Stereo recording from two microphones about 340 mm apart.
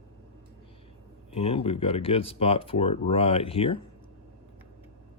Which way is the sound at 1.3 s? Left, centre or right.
Centre.